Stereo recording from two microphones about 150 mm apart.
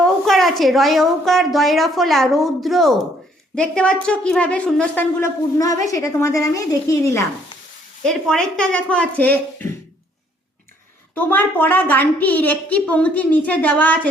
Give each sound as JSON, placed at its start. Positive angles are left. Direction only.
{"t": 0.0, "sound": "a woman's voice", "side_deg": 0}
{"t": 5.2, "sound": "a woman's voice", "side_deg": 20}
{"t": 8.0, "sound": "a woman's voice", "side_deg": 5}
{"t": 11.1, "sound": "a woman's voice", "side_deg": 15}